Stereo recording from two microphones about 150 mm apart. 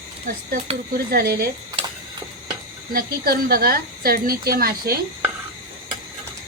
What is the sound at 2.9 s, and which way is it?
A woman's voice, 85° right.